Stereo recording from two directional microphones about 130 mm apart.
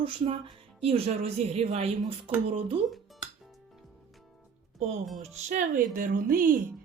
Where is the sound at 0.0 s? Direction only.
50° right (ahead or behind).